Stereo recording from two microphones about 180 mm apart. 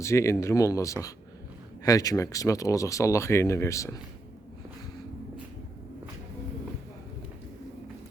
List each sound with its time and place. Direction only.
0.0 s speech: 15° left (ahead or behind)